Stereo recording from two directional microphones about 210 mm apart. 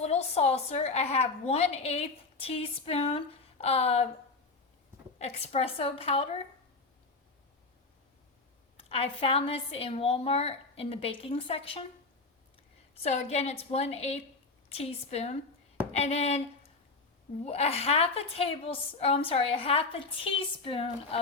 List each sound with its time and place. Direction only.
0.0 s a woman's voice: 30° left (ahead or behind)
5.2 s a woman's voice: 30° left (ahead or behind)
8.8 s a woman's voice: 25° left (ahead or behind)
12.9 s a woman's voice: 30° left (ahead or behind)
15.9 s a sound: 30° left (ahead or behind)
17.4 s a woman's voice: 30° left (ahead or behind)